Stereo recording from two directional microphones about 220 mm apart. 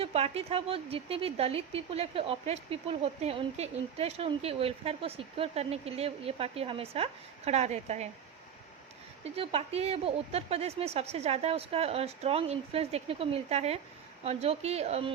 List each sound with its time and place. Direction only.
0.0 s speech: 25° right (ahead or behind)
9.2 s speech: 25° right (ahead or behind)